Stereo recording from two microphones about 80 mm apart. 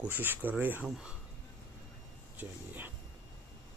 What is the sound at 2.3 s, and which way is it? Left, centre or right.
Speech, right.